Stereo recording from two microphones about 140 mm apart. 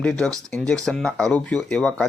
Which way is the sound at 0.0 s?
5° left (ahead or behind).